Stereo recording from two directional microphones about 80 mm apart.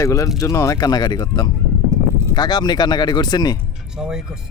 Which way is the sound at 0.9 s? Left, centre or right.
Left.